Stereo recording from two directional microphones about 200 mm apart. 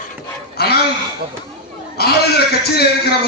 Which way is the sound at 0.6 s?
50° left (ahead or behind).